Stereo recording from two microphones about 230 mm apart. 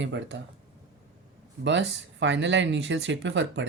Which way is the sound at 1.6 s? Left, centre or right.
Right.